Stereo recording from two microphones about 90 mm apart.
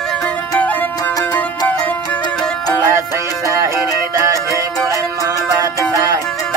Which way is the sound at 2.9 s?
40° right (ahead or behind).